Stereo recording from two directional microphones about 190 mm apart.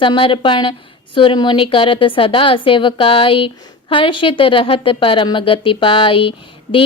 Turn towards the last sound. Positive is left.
turn(degrees=25)  # may be behind; listen again after turning